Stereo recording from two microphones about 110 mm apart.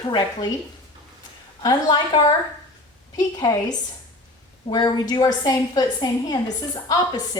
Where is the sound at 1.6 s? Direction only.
40° left (ahead or behind).